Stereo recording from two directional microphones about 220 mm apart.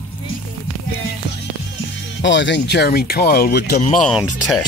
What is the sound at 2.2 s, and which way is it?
Speech, 55° left (ahead or behind).